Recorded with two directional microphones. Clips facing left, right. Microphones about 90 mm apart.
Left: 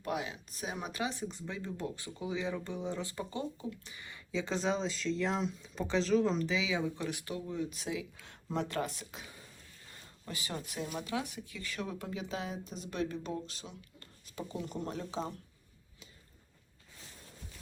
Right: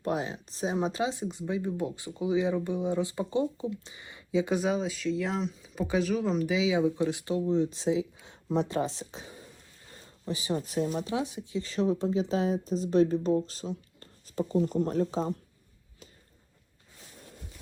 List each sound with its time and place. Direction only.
0.0 s speech: 35° right (ahead or behind); by 6.5 s 5° right (ahead or behind)
6.5 s speech: 20° right (ahead or behind)
10.7 s speech: 35° right (ahead or behind)
11.1 s speech: 20° right (ahead or behind); by 15.3 s 40° right (ahead or behind)